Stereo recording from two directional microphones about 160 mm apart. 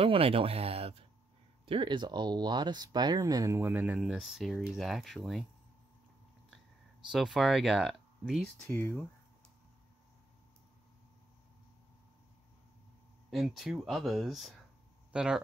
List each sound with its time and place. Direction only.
0.0 s speech: 35° right (ahead or behind); by 5.4 s centre (ahead or behind)
7.1 s speech: centre (ahead or behind)
13.3 s speech: centre (ahead or behind)